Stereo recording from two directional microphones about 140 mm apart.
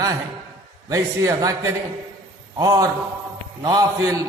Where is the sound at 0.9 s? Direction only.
25° right (ahead or behind).